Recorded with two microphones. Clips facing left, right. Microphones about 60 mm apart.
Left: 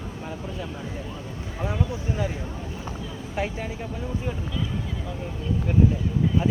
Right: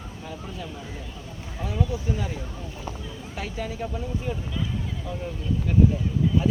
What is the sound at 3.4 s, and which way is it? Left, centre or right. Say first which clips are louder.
Speech: left 3 dB; left.